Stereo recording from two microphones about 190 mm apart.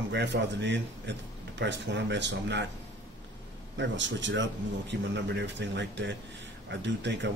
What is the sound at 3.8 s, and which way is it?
A man's voice, 70° right (ahead or behind).